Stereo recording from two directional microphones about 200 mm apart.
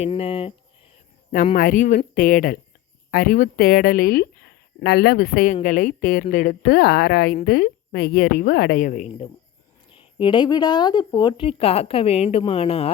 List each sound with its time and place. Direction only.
0.0 s a woman's voice: 30° left (ahead or behind)
1.5 s a woman's voice: 40° left (ahead or behind)
10.2 s a woman's voice: 25° left (ahead or behind)